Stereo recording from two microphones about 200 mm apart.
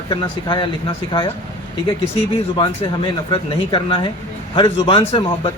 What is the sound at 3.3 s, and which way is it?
Speech, 20° left (ahead or behind).